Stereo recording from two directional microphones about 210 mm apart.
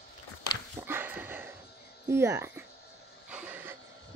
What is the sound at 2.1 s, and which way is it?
A woman's voice, 10° right (ahead or behind).